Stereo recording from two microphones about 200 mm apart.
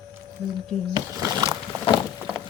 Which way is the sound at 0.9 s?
15° right (ahead or behind).